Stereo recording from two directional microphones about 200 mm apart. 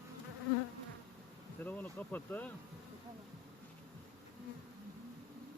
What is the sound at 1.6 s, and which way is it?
Insect, 10° left (ahead or behind).